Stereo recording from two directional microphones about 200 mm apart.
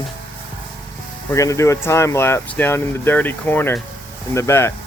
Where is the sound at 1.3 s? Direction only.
15° left (ahead or behind).